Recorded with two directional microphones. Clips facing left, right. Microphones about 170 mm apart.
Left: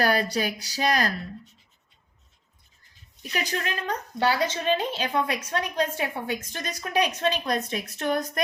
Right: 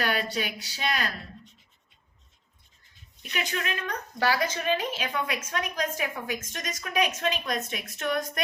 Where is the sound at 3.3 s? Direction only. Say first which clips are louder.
Left 2 dB; 35° left (ahead or behind).